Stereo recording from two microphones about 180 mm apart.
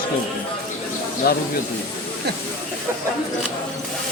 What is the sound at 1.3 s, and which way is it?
Speech, 55° left (ahead or behind).